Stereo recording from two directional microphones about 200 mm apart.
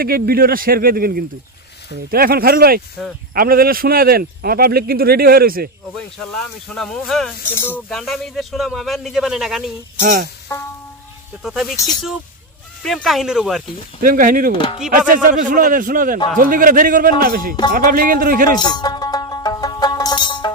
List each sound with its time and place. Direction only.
0.0 s speech: 50° right (ahead or behind)
6.7 s speech: 5° left (ahead or behind)
10.0 s speech: 45° right (ahead or behind)
11.4 s speech: centre (ahead or behind)
12.8 s speech: centre (ahead or behind)
14.0 s speech: 45° right (ahead or behind)
18.6 s music: 20° left (ahead or behind)